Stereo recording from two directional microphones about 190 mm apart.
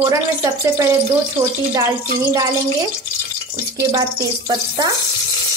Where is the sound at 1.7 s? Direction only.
15° right (ahead or behind).